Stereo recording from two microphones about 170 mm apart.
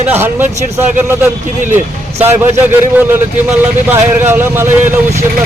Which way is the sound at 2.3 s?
10° right (ahead or behind).